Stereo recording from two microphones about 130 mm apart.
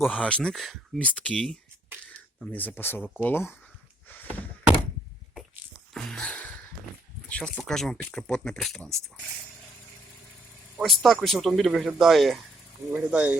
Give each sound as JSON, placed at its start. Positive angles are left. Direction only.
{"t": 0.0, "sound": "speech", "side_deg": 10}
{"t": 4.1, "sound": "door", "side_deg": 15}
{"t": 5.9, "sound": "a sound", "side_deg": 0}
{"t": 7.3, "sound": "speech", "side_deg": 10}
{"t": 10.8, "sound": "speech", "side_deg": 0}